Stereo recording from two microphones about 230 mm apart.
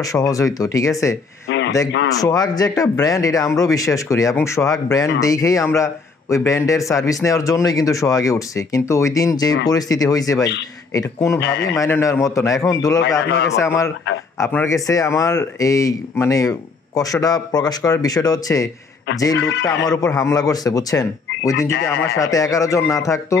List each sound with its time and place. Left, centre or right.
0.0 s a man's voice: centre
2.1 s a man's voice: centre
19.3 s speech: left
19.6 s a man's voice: centre